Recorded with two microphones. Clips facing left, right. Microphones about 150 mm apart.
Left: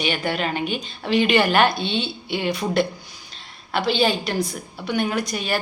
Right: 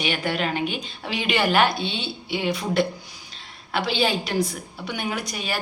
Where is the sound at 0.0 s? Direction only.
Centre (ahead or behind).